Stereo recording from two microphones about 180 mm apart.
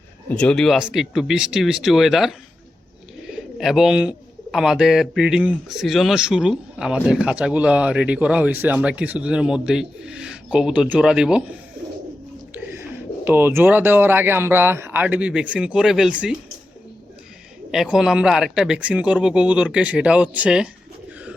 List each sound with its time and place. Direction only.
0.3 s a man's voice: 5° left (ahead or behind)
3.6 s a man's voice: centre (ahead or behind)
13.2 s speech: 10° right (ahead or behind)
17.7 s a man's voice: centre (ahead or behind)